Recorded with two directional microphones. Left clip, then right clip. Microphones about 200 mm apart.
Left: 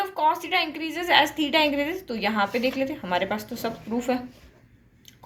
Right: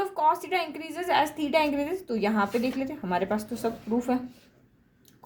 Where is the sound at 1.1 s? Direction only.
45° right (ahead or behind).